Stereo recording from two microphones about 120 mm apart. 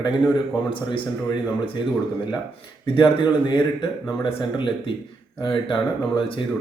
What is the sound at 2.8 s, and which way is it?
Speech, 45° left (ahead or behind).